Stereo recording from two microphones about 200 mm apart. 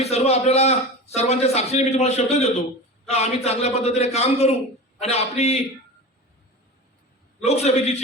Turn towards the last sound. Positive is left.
turn(degrees=30)  # may be behind; listen again after turning